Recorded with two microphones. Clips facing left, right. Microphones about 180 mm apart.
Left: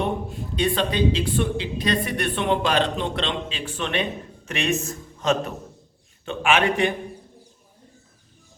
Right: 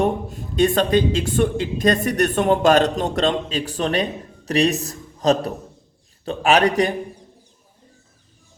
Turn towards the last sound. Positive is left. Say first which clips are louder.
# right 4 dB
turn(degrees=-40)  # may be behind; listen again after turning